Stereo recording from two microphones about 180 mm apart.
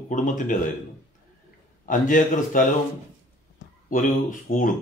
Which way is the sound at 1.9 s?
50° left (ahead or behind).